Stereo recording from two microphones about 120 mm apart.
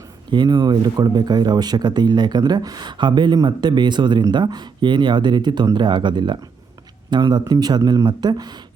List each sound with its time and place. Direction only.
0.3 s speech: 40° right (ahead or behind)